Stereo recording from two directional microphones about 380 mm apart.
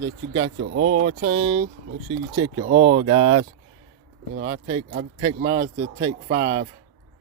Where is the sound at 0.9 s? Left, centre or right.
Centre.